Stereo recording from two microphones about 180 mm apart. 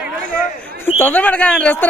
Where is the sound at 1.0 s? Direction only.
10° left (ahead or behind).